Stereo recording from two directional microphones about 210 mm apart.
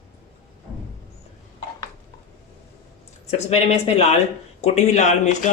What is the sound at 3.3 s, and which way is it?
Speech, 30° left (ahead or behind).